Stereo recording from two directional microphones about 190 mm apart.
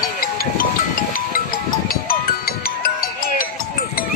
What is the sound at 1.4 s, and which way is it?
Music, 45° left (ahead or behind).